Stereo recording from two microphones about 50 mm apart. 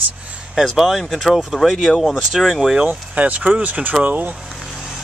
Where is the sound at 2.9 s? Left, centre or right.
Right.